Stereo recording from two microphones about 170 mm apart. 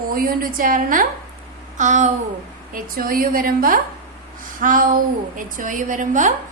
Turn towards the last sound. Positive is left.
turn(degrees=-50)  # may be behind; listen again after turning